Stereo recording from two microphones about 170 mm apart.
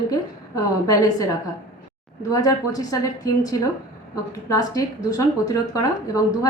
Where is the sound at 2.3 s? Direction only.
20° left (ahead or behind).